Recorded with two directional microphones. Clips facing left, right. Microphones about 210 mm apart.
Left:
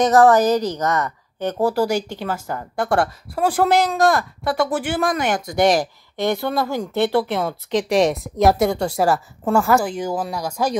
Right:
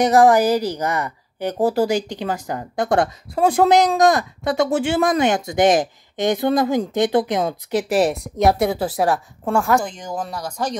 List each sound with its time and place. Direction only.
0.0 s speech: 10° right (ahead or behind)
7.9 s a woman's voice: centre (ahead or behind)